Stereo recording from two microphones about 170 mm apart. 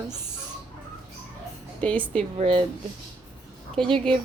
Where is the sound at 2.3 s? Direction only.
35° right (ahead or behind).